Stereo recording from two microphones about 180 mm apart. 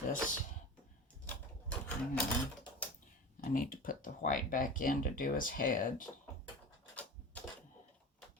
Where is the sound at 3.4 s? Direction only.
50° left (ahead or behind).